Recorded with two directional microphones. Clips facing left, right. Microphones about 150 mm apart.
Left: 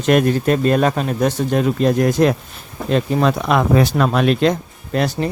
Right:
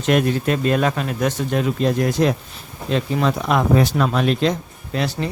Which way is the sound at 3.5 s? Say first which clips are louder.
Left 2 dB; 90° left.